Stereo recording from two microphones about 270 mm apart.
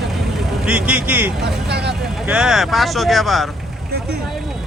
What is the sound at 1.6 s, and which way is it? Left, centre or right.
Speech, right.